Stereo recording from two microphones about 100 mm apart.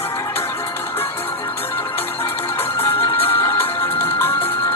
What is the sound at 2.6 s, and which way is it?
Music, 20° left (ahead or behind).